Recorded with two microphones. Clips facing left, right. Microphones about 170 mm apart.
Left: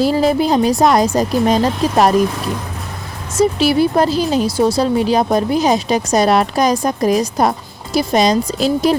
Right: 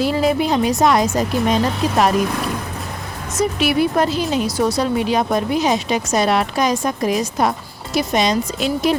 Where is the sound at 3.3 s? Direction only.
30° left (ahead or behind).